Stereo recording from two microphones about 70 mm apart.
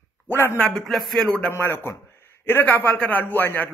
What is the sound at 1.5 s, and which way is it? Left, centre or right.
Speech, left.